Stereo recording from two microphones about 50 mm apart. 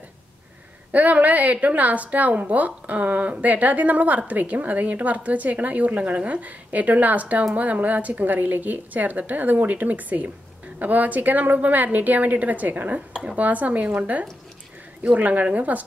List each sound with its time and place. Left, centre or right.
0.9 s a woman's voice: right
13.1 s a woman's voice: right